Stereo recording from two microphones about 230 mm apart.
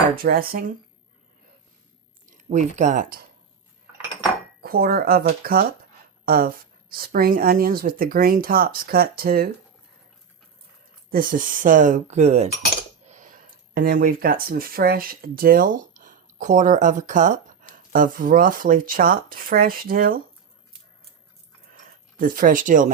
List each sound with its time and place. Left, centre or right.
0.2 s speech: right
2.2 s speech: right
4.6 s speech: right
11.1 s speech: right
22.2 s speech: right